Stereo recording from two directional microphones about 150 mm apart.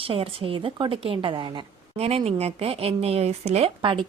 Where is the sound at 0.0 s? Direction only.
40° right (ahead or behind).